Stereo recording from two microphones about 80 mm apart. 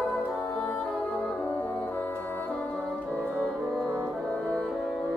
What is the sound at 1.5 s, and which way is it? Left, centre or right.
Brass instrument, left.